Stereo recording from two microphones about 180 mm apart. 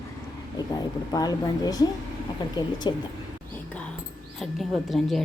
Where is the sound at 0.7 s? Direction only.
20° left (ahead or behind).